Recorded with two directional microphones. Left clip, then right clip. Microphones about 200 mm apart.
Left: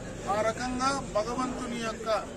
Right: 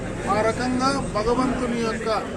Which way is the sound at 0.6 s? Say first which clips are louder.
Right 6 dB; 10° left (ahead or behind).